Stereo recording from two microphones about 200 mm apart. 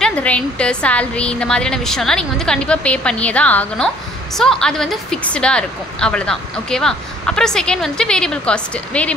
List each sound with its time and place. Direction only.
0.0 s a woman's voice: 5° left (ahead or behind)